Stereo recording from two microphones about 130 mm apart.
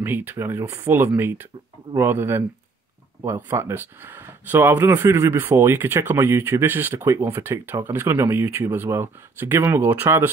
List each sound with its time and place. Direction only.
0.0 s speech: 15° right (ahead or behind)